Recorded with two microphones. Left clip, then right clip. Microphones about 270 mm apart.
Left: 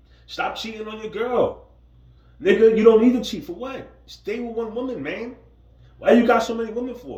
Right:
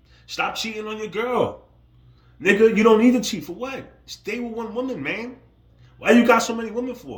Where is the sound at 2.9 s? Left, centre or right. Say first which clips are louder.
Left 2 dB; right.